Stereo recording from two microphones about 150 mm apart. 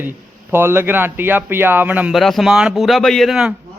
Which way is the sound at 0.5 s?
15° right (ahead or behind).